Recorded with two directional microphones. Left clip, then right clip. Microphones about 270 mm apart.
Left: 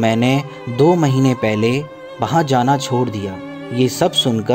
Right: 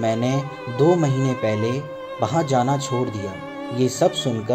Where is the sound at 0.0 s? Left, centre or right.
Left.